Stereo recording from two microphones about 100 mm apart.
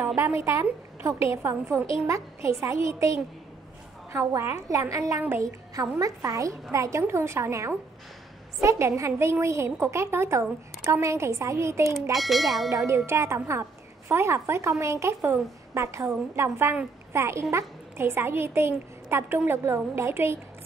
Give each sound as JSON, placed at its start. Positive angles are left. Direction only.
{"t": 0.0, "sound": "a woman's voice", "side_deg": -25}
{"t": 12.1, "sound": "speech", "side_deg": 0}
{"t": 12.6, "sound": "a woman's voice", "side_deg": -30}